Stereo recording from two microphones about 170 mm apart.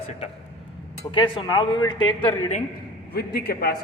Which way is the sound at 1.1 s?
25° left (ahead or behind).